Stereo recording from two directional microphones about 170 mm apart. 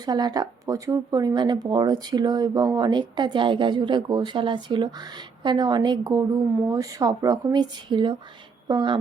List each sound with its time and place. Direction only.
0.0 s speech: 25° right (ahead or behind)